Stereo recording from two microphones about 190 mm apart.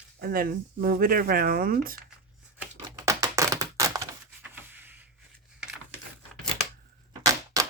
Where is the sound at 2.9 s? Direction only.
15° right (ahead or behind).